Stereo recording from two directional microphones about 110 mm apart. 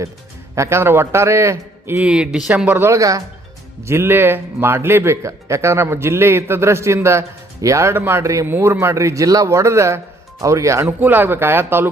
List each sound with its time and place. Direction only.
0.5 s speech: 25° right (ahead or behind)
2.0 s speech: 10° right (ahead or behind)
2.6 s speech: 20° right (ahead or behind)
10.8 s speech: 15° right (ahead or behind)